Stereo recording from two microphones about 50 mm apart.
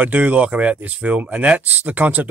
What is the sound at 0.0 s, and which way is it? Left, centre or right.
Speech, right.